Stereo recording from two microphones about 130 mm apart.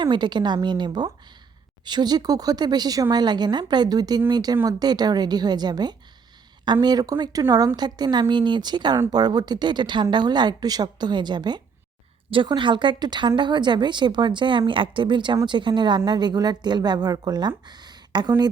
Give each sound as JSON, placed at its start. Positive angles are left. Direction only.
{"t": 0.0, "sound": "speech", "side_deg": -35}